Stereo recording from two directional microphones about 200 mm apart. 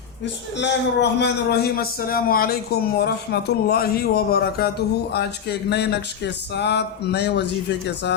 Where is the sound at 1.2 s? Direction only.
55° left (ahead or behind).